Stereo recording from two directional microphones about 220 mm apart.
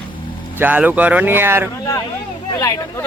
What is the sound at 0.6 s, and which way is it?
Mantra, 5° right (ahead or behind).